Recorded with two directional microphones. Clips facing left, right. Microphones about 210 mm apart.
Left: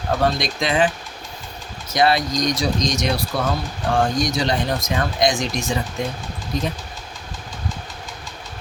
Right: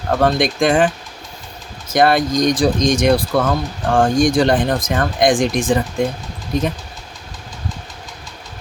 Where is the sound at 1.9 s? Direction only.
50° right (ahead or behind).